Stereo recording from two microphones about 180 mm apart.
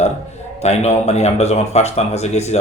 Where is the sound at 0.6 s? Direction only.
40° left (ahead or behind).